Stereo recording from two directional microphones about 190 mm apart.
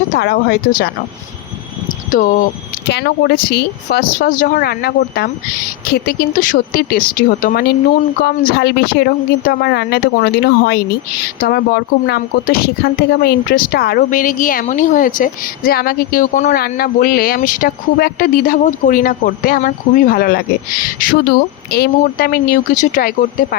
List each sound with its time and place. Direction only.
0.1 s speech: 55° left (ahead or behind)
2.9 s speech: 60° left (ahead or behind)